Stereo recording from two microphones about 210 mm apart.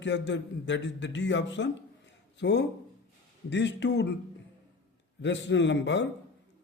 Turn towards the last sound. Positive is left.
turn(degrees=60)  # may be behind; listen again after turning